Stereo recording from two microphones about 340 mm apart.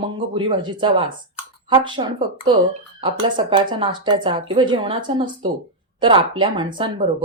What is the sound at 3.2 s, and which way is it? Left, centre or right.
Speech, centre.